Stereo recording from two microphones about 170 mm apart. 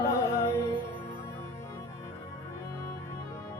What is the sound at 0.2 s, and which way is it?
Music, 15° left (ahead or behind).